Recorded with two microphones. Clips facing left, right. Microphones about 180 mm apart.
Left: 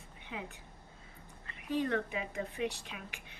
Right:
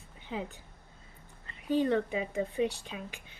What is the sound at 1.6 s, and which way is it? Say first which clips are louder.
Speech: right 5 dB; 30° right (ahead or behind).